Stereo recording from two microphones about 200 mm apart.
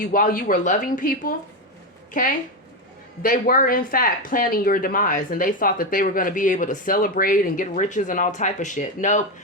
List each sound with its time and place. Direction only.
0.1 s speech: 45° left (ahead or behind)